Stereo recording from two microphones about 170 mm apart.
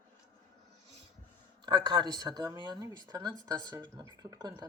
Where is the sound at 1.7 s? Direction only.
25° right (ahead or behind).